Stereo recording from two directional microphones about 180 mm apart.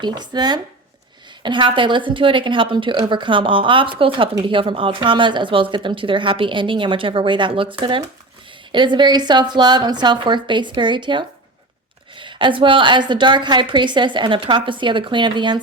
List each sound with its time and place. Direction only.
0.0 s a woman's voice: 25° right (ahead or behind)